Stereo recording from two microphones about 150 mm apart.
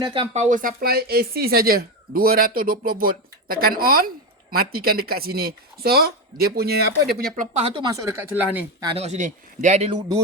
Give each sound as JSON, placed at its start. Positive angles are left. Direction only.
{"t": 0.0, "sound": "speech", "side_deg": -35}
{"t": 0.3, "sound": "speech", "side_deg": -55}
{"t": 7.8, "sound": "speech", "side_deg": -25}
{"t": 9.0, "sound": "speech", "side_deg": -50}